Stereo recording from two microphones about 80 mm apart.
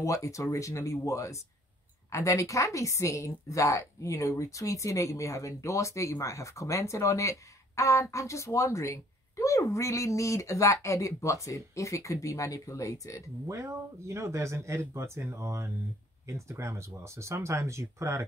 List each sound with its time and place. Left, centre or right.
0.0 s a woman's voice: left
13.5 s speech: right